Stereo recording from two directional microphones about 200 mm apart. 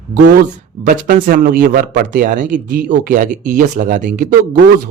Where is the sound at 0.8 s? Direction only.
45° right (ahead or behind).